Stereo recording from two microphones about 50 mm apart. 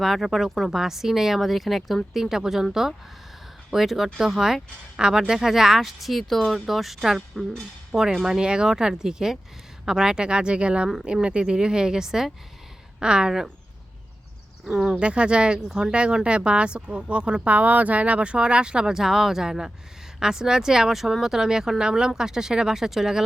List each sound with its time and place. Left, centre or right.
0.0 s speech: centre
3.7 s speech: centre
14.6 s speech: centre
14.9 s speech: right